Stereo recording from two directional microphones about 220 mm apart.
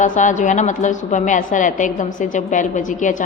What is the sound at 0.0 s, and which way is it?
A woman's voice, 35° left (ahead or behind).